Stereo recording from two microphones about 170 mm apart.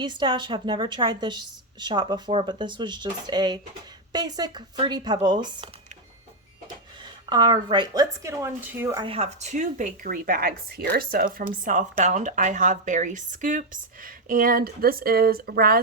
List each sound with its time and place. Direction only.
0.0 s a woman's voice: 25° right (ahead or behind)
7.3 s a woman's voice: 25° right (ahead or behind)
9.0 s speech: 35° right (ahead or behind); by 11.3 s 60° right (ahead or behind)
11.3 s speech: 50° right (ahead or behind)